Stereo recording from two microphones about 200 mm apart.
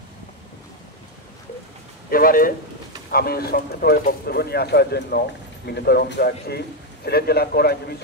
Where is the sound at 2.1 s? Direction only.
45° left (ahead or behind).